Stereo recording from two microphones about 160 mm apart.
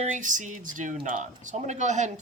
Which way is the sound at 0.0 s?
50° right (ahead or behind).